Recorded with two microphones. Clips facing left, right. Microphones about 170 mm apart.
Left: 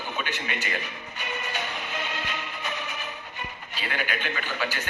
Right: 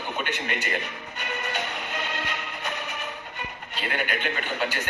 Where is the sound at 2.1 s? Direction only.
60° right (ahead or behind).